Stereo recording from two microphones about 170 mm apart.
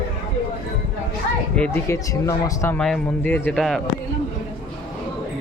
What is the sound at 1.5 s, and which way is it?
Speech, 10° left (ahead or behind).